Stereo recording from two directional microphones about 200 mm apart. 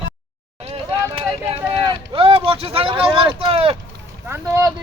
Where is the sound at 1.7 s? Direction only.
25° right (ahead or behind).